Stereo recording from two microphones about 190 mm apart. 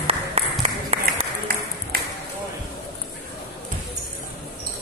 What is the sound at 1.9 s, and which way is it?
Ping, 55° right (ahead or behind).